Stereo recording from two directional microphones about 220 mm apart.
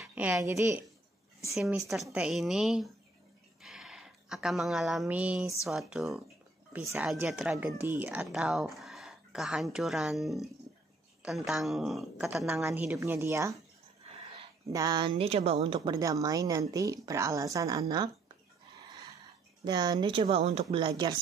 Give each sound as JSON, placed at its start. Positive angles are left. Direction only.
{"t": 0.0, "sound": "speech", "side_deg": -5}
{"t": 3.6, "sound": "a sound", "side_deg": 0}
{"t": 5.0, "sound": "speech", "side_deg": -5}
{"t": 19.6, "sound": "speech", "side_deg": -20}